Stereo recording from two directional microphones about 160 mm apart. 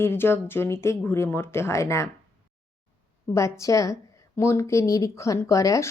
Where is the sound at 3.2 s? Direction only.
20° left (ahead or behind).